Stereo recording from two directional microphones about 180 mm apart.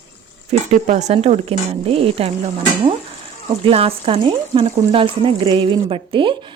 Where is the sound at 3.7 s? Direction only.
35° right (ahead or behind).